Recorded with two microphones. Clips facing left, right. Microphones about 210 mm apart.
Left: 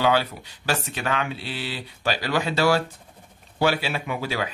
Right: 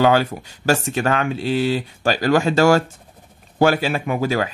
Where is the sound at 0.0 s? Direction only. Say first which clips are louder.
Right 6 dB; 45° right (ahead or behind).